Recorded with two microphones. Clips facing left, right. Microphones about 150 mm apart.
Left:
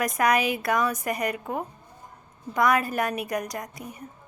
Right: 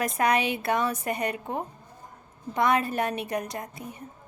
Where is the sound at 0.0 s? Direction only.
25° right (ahead or behind).